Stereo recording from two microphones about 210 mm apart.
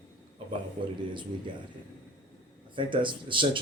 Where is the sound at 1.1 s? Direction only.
20° right (ahead or behind).